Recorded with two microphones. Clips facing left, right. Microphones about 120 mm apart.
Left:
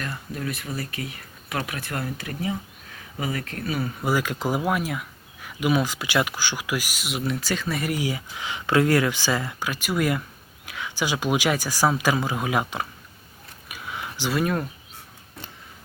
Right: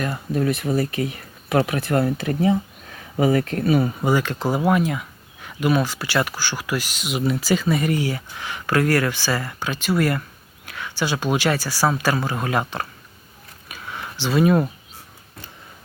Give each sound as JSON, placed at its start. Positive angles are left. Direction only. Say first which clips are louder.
{"t": 0.3, "sound": "speech", "louder": "right 11 dB", "side_deg": -25}
{"t": 4.0, "sound": "speech", "louder": "right 4 dB", "side_deg": 5}
{"t": 7.9, "sound": "speech", "louder": "right 3 dB", "side_deg": 10}
{"t": 13.7, "sound": "a sound", "louder": "right 1 dB", "side_deg": 10}
{"t": 14.3, "sound": "speech", "louder": "right 8 dB", "side_deg": -10}